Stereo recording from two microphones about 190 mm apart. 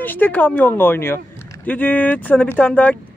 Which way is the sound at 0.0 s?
10° left (ahead or behind).